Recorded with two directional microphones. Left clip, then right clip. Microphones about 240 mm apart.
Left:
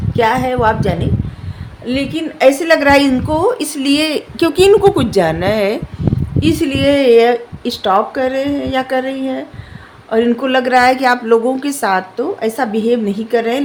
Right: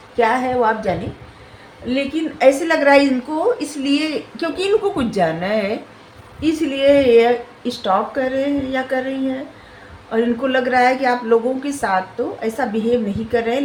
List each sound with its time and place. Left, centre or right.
0.2 s a woman's voice: left